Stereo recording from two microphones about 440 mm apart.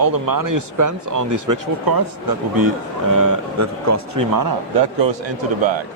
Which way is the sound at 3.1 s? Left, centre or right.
Right.